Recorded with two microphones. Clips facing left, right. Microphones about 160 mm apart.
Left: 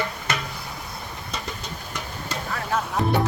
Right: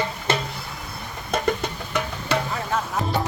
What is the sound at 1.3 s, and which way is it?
Music, 60° right (ahead or behind).